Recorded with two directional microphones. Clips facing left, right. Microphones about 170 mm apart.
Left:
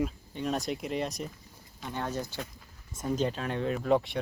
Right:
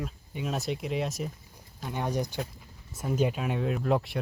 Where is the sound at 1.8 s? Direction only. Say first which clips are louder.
Right 3 dB; 15° right (ahead or behind).